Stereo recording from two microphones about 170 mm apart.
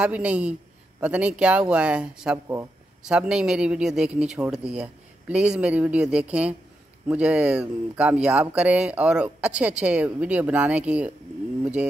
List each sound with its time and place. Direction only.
0.0 s speech: 5° right (ahead or behind)
3.0 s speech: 5° right (ahead or behind)